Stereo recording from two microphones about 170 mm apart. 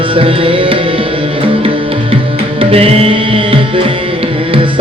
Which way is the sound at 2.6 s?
35° right (ahead or behind).